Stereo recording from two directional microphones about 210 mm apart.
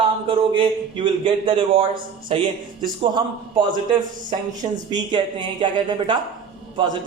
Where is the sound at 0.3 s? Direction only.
25° right (ahead or behind).